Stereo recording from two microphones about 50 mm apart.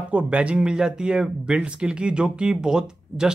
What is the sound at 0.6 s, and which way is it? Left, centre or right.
Speech, centre.